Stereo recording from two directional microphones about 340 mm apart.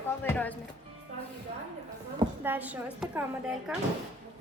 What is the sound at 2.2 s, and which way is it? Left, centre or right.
A woman's voice, centre.